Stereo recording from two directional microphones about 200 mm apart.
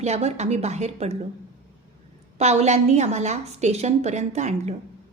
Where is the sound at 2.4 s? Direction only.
35° right (ahead or behind).